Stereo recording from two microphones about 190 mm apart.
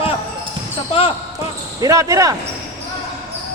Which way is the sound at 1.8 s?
15° right (ahead or behind).